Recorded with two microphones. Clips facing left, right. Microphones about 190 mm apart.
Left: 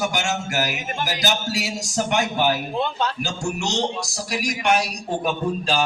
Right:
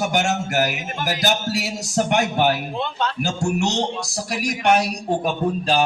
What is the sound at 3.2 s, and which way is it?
A man's voice, 60° right (ahead or behind).